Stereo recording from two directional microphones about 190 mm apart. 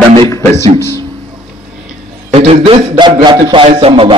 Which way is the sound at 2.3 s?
30° right (ahead or behind).